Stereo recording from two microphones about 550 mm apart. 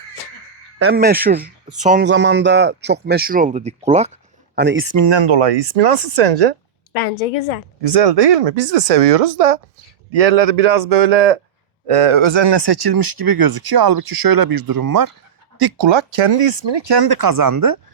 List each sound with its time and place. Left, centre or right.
0.8 s speech: centre
5.0 s speech: right
5.4 s speech: right
7.8 s speech: right
11.9 s speech: right
16.0 s speech: right